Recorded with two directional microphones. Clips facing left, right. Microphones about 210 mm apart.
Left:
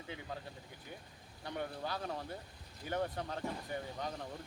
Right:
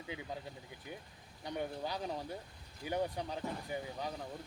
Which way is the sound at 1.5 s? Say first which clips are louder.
Right 1 dB; 15° right (ahead or behind).